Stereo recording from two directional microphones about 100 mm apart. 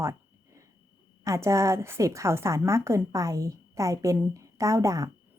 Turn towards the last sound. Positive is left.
turn(degrees=-35)  # may be behind; listen again after turning